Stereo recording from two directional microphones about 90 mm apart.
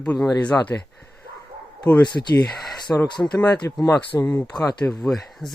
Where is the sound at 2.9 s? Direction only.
15° left (ahead or behind).